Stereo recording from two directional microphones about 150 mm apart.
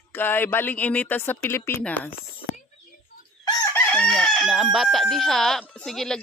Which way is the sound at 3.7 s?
10° left (ahead or behind).